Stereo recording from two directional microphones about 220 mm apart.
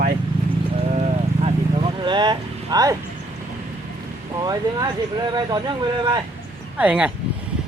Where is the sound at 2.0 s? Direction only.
20° right (ahead or behind).